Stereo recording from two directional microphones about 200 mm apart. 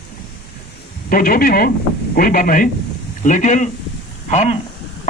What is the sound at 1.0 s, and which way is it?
A man's voice, 45° left (ahead or behind).